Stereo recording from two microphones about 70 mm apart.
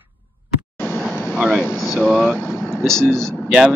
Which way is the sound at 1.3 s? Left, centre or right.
Centre.